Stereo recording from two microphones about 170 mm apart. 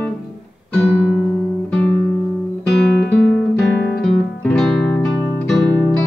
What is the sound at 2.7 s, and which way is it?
Music, centre (ahead or behind).